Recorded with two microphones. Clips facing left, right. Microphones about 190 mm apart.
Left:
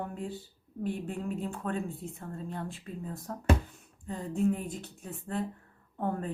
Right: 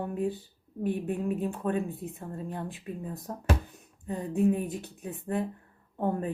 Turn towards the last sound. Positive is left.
turn(degrees=-15)  # may be behind; listen again after turning